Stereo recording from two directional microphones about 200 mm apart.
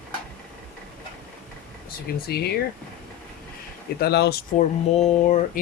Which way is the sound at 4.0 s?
55° left (ahead or behind).